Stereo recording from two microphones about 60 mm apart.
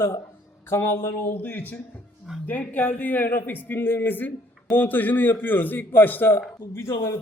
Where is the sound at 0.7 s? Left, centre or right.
Left.